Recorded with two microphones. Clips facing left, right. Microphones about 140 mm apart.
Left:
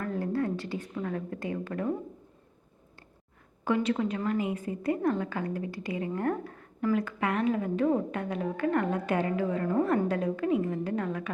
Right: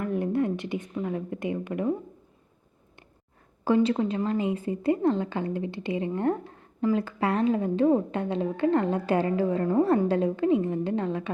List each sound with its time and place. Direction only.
0.0 s a woman's voice: 20° right (ahead or behind)
3.6 s a woman's voice: 30° right (ahead or behind)